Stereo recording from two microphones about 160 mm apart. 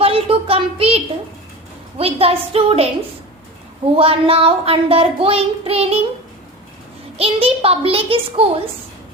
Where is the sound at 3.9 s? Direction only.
35° right (ahead or behind).